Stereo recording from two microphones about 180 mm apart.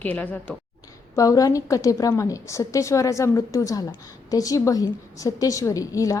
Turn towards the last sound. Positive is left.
turn(degrees=20)  # may be behind; listen again after turning